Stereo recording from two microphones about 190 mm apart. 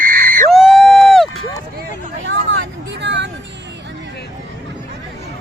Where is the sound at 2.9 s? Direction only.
70° right (ahead or behind).